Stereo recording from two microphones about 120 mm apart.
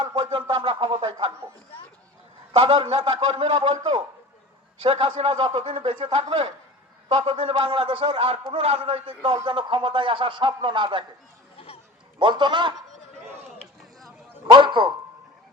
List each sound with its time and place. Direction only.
0.0 s a man's voice: 45° right (ahead or behind)
2.5 s a man's voice: 50° right (ahead or behind)
11.5 s a sound: 55° left (ahead or behind)
12.2 s a man's voice: 40° right (ahead or behind)
14.5 s a man's voice: 40° right (ahead or behind)